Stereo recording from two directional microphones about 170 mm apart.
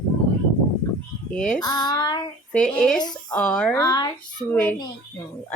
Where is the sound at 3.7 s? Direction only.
20° left (ahead or behind).